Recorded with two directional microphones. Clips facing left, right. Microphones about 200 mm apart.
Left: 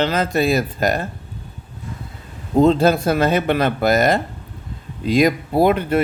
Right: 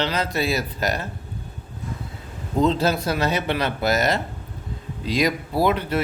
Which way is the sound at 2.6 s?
50° left (ahead or behind).